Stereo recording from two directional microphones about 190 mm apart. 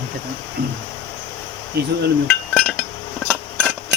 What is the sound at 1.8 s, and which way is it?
Speech, 60° right (ahead or behind).